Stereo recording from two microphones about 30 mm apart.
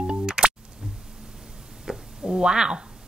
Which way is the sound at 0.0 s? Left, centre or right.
Right.